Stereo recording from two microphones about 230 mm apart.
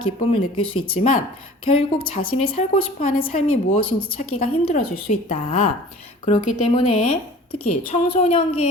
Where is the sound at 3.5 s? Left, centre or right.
Left.